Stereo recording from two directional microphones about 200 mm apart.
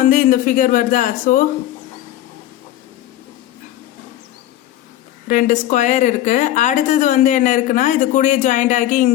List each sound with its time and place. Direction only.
0.0 s a woman's voice: 40° left (ahead or behind)
5.3 s a woman's voice: 40° left (ahead or behind)